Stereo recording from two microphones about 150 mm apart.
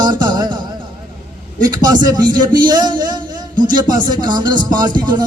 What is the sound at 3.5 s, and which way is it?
Speech, 65° right (ahead or behind).